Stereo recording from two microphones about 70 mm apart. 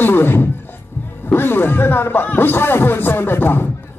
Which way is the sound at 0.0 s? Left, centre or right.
Left.